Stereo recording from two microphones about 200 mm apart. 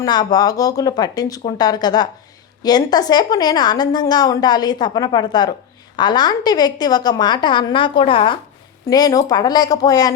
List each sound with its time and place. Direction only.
0.0 s a woman's voice: 20° left (ahead or behind)